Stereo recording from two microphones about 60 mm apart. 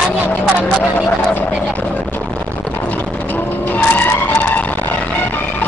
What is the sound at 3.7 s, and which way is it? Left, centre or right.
Vehicle, left.